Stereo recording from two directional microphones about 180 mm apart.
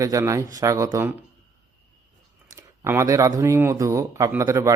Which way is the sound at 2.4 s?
15° right (ahead or behind).